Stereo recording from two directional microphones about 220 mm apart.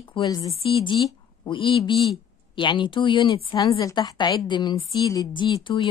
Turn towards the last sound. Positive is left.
turn(degrees=20)  # may be behind; listen again after turning